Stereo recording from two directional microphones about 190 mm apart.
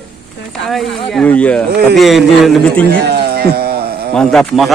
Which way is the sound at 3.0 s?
55° right (ahead or behind).